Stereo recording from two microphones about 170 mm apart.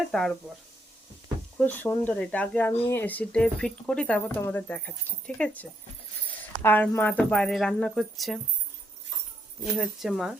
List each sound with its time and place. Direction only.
0.1 s speech: 5° left (ahead or behind)
1.5 s speech: 10° left (ahead or behind)
9.7 s speech: centre (ahead or behind)